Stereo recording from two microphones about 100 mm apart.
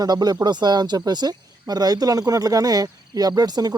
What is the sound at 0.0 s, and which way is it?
Speech, 40° right (ahead or behind).